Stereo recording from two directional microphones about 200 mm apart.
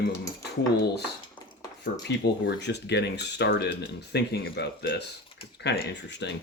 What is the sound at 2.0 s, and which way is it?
Speech, 55° left (ahead or behind).